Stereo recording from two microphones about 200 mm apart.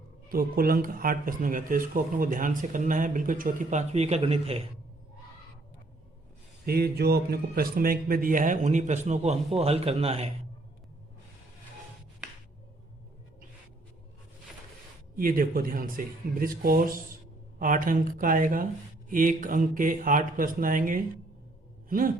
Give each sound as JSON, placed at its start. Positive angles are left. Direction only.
{"t": 0.3, "sound": "speech", "side_deg": -45}
{"t": 6.7, "sound": "speech", "side_deg": -50}
{"t": 15.1, "sound": "speech", "side_deg": -45}